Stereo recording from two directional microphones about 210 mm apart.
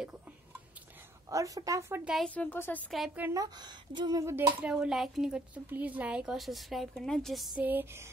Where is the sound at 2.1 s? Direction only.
5° left (ahead or behind).